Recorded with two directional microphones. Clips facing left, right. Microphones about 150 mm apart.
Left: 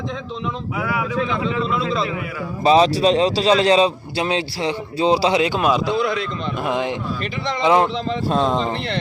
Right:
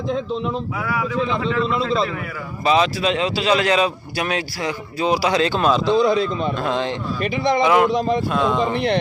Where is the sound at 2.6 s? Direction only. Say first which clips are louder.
Left 4 dB; 35° left (ahead or behind).